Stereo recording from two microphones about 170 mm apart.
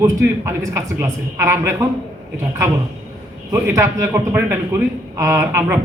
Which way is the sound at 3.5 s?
15° right (ahead or behind).